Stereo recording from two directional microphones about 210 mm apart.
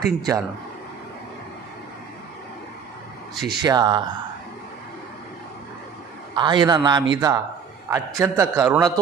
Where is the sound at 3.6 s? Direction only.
20° right (ahead or behind).